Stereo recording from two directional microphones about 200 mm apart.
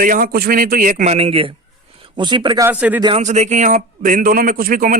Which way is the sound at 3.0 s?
30° right (ahead or behind).